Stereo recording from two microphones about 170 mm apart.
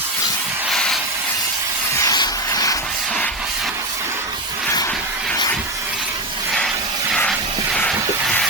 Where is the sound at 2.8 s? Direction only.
5° left (ahead or behind).